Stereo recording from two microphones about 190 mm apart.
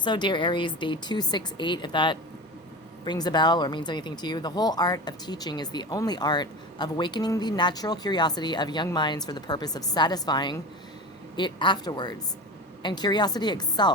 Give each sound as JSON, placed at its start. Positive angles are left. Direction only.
{"t": 0.0, "sound": "speech", "side_deg": 25}